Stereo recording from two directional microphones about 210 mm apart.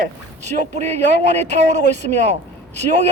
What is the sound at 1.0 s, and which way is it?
A man's voice, 55° left (ahead or behind).